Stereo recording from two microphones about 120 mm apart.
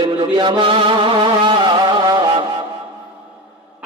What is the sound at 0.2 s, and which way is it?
Music, 40° right (ahead or behind).